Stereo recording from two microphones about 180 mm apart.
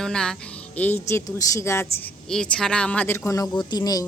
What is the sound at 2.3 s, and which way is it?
A woman's voice, 5° left (ahead or behind).